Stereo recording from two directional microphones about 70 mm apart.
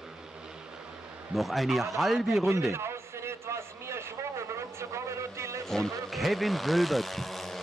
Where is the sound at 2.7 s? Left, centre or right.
Right.